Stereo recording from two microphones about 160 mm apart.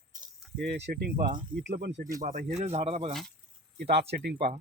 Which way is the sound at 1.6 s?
90° right.